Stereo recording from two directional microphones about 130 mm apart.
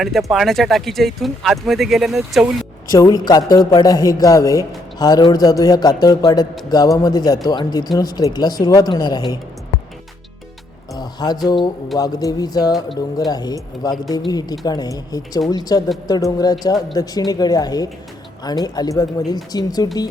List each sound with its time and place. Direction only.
0.0 s speech: centre (ahead or behind)
2.9 s speech: 30° left (ahead or behind)
10.9 s speech: 30° left (ahead or behind)